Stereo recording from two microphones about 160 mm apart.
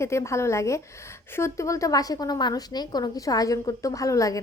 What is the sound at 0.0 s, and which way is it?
A woman's voice, 15° left (ahead or behind).